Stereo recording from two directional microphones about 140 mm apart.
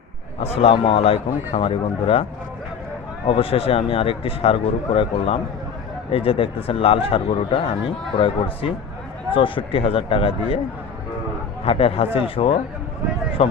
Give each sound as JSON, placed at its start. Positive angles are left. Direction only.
{"t": 0.4, "sound": "a man's voice", "side_deg": 45}
{"t": 3.2, "sound": "speech", "side_deg": 40}
{"t": 11.6, "sound": "a man's voice", "side_deg": 40}